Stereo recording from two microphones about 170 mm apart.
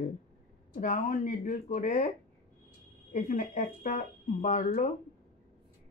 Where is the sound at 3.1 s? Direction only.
50° left (ahead or behind).